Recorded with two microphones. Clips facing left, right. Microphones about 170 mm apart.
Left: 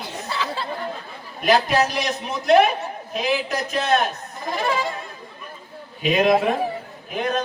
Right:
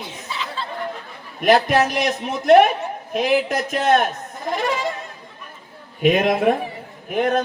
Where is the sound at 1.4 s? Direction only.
55° right (ahead or behind).